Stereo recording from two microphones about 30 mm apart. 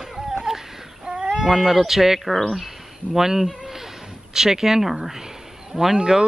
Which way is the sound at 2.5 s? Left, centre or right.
Centre.